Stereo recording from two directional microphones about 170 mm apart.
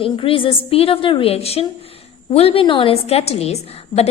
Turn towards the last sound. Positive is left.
turn(degrees=35)  # may be behind; listen again after turning